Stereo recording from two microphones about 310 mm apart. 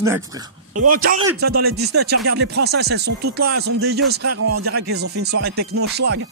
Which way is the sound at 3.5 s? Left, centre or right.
Right.